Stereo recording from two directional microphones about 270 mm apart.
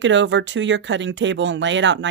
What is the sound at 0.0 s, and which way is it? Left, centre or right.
A woman's voice, right.